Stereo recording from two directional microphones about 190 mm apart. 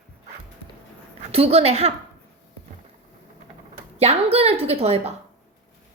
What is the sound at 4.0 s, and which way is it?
A woman's voice, 35° right (ahead or behind).